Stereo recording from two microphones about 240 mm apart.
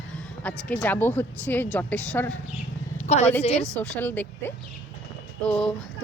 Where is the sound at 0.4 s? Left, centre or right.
Centre.